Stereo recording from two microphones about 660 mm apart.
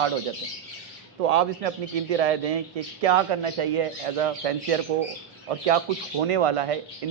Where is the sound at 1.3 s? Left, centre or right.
Right.